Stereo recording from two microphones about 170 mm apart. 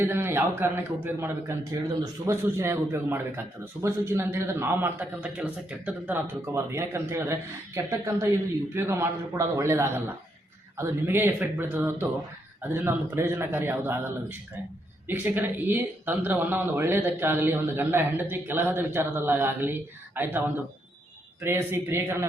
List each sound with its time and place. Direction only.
0.0 s a man's voice: 15° right (ahead or behind)
21.4 s a man's voice: 15° right (ahead or behind)